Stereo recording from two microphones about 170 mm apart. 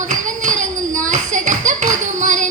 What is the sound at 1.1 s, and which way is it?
Clapping, 45° right (ahead or behind).